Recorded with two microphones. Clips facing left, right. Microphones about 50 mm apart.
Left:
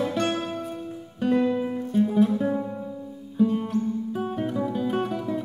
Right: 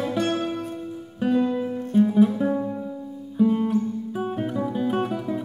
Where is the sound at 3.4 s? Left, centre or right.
Centre.